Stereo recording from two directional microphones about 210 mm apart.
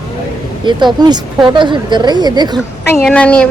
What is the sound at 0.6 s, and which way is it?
A woman's voice, 20° right (ahead or behind).